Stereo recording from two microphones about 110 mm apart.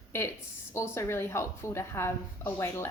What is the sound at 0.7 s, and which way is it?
A woman's voice, 25° left (ahead or behind).